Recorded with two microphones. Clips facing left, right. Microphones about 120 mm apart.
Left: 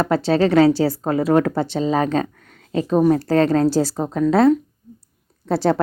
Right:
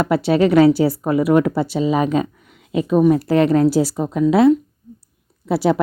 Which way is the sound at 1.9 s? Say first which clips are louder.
Right 1 dB; 15° right (ahead or behind).